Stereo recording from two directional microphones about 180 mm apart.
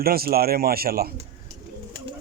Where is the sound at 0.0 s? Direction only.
55° right (ahead or behind).